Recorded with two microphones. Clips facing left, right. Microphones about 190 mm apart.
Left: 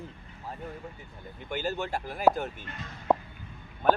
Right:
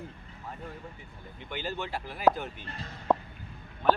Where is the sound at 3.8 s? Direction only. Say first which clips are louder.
Left 1 dB; 50° left (ahead or behind).